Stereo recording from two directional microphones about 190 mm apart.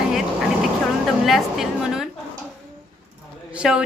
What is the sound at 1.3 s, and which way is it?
Speech, centre (ahead or behind).